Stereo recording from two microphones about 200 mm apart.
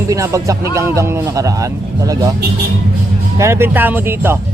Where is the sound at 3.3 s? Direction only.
15° right (ahead or behind).